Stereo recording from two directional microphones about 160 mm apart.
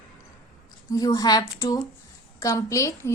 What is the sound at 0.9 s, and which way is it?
A woman's voice, 25° left (ahead or behind).